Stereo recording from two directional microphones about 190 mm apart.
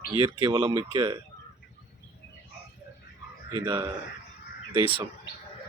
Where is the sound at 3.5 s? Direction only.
20° right (ahead or behind).